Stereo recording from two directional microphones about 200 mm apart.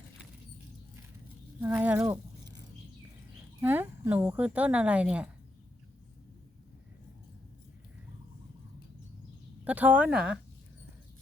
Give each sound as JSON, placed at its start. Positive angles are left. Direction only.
{"t": 1.6, "sound": "speech", "side_deg": -10}
{"t": 2.4, "sound": "a sound", "side_deg": -20}
{"t": 3.6, "sound": "speech", "side_deg": -10}
{"t": 9.6, "sound": "speech", "side_deg": -10}